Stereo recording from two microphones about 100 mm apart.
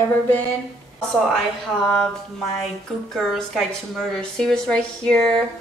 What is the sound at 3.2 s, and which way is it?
A woman's voice, centre (ahead or behind).